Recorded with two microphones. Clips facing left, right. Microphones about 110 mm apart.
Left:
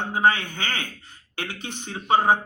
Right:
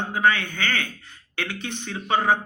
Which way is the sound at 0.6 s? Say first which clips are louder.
Right 4 dB; 20° left (ahead or behind).